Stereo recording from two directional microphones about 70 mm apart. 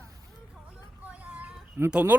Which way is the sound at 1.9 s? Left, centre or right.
Centre.